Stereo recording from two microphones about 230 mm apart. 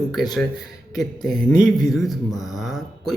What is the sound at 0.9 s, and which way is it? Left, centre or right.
Speech, centre.